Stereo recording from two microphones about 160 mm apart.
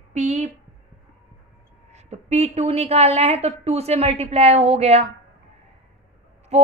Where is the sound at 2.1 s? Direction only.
40° right (ahead or behind).